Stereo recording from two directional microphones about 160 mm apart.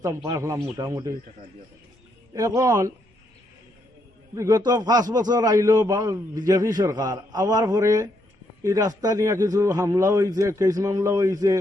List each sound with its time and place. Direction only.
0.3 s a man's voice: 20° right (ahead or behind)
2.3 s a man's voice: 20° right (ahead or behind)
4.4 s a man's voice: 25° right (ahead or behind)